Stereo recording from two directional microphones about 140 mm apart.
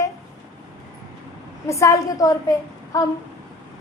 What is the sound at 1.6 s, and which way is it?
A woman's voice, 20° left (ahead or behind).